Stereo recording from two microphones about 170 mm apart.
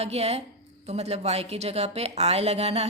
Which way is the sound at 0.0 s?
40° right (ahead or behind).